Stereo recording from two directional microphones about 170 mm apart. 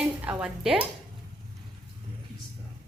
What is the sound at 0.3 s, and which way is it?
Speech, 5° right (ahead or behind).